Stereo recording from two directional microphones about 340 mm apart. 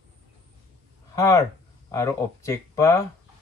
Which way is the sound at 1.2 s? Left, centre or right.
Centre.